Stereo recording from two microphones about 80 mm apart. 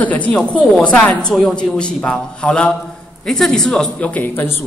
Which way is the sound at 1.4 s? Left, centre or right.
Centre.